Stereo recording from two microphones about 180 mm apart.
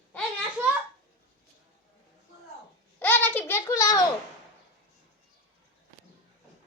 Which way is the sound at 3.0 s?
10° left (ahead or behind).